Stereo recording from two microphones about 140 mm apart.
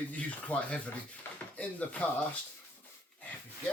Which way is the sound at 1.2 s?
15° left (ahead or behind).